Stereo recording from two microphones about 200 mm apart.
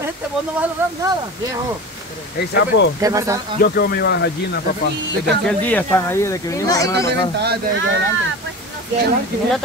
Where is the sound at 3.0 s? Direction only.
15° right (ahead or behind).